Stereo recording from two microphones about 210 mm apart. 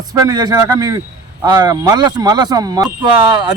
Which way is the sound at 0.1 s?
20° right (ahead or behind).